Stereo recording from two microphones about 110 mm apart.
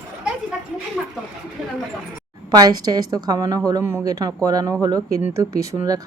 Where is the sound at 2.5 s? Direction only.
35° right (ahead or behind).